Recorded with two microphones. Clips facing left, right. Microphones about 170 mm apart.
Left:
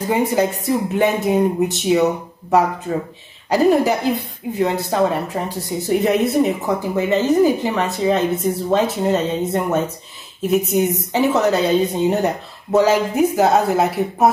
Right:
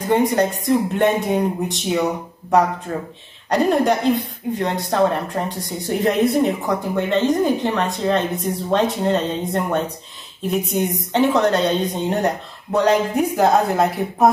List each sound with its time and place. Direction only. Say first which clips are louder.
0.1 s speech: right 1 dB; 5° left (ahead or behind)